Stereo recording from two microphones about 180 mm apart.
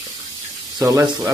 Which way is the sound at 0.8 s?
15° right (ahead or behind).